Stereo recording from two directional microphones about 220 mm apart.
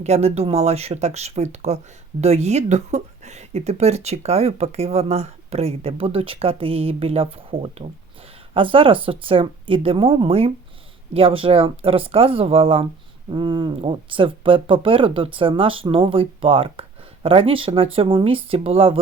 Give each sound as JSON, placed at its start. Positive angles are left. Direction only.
{"t": 0.0, "sound": "speech", "side_deg": -30}